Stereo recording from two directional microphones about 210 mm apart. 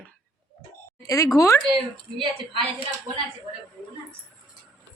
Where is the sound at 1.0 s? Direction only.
15° left (ahead or behind).